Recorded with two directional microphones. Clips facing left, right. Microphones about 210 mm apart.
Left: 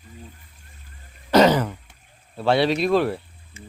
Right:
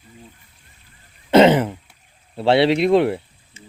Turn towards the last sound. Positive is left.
turn(degrees=-20)  # may be behind; listen again after turning